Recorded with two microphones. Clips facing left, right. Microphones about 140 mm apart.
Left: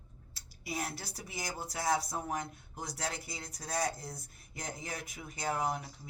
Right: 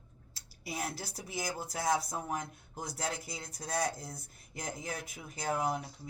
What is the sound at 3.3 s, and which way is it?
Speech, centre (ahead or behind).